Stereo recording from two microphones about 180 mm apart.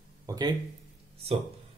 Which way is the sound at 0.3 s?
20° right (ahead or behind).